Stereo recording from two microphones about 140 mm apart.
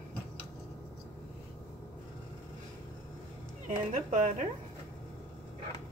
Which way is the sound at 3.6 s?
65° right (ahead or behind).